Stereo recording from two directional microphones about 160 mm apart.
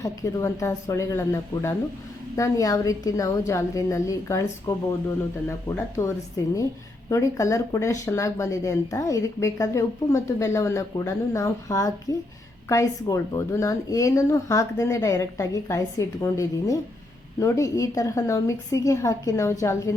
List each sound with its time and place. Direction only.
0.0 s speech: 20° left (ahead or behind)